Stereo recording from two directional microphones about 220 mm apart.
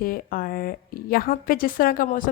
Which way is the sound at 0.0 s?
40° left (ahead or behind).